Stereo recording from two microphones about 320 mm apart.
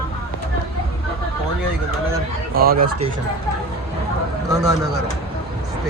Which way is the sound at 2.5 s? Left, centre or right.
Right.